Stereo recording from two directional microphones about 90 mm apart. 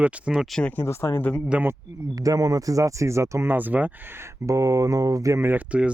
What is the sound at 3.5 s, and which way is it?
Speech, 20° right (ahead or behind).